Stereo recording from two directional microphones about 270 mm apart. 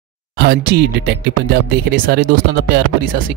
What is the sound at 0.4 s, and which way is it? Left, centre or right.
Speech, right.